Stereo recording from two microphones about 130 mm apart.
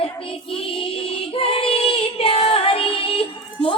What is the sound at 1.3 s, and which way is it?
Female singing, 45° left (ahead or behind).